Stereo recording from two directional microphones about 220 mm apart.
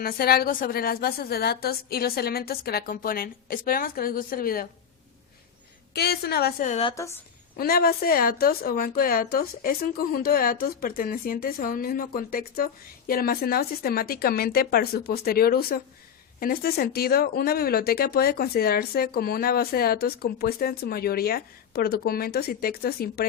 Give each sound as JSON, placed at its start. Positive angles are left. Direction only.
{"t": 0.0, "sound": "a woman's voice", "side_deg": 45}
{"t": 5.9, "sound": "a woman's voice", "side_deg": 45}
{"t": 6.9, "sound": "a woman's voice", "side_deg": 15}
{"t": 7.5, "sound": "a woman's voice", "side_deg": 45}